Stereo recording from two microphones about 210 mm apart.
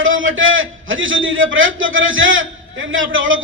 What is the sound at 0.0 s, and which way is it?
A man's voice, 70° right (ahead or behind).